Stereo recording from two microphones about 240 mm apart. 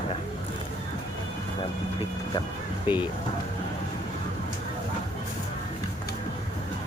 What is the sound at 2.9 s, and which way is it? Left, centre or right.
Speech, centre.